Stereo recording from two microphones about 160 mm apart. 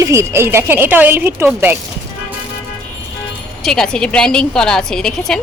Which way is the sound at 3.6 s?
5° left (ahead or behind).